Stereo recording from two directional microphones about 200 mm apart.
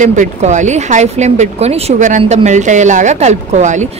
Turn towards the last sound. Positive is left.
turn(degrees=-35)  # may be behind; listen again after turning